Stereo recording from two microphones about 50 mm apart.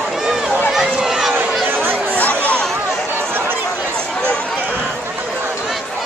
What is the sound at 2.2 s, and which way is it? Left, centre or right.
Chatter, left.